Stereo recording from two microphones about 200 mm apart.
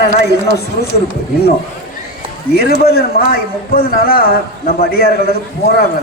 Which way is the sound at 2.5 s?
50° left (ahead or behind).